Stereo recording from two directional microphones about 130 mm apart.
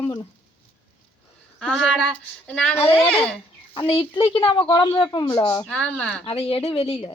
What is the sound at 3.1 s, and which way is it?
Speech, 5° left (ahead or behind).